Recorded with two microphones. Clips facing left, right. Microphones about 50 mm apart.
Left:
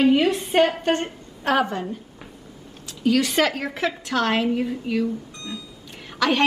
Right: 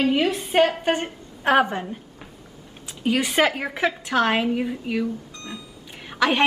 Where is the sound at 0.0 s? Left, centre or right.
Centre.